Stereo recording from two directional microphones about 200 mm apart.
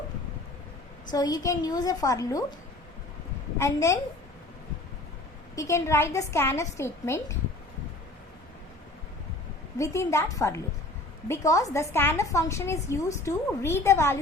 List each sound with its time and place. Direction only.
1.1 s a woman's voice: 20° left (ahead or behind)
3.6 s a woman's voice: 15° left (ahead or behind)
5.5 s a woman's voice: 15° left (ahead or behind)
9.7 s a woman's voice: 15° left (ahead or behind)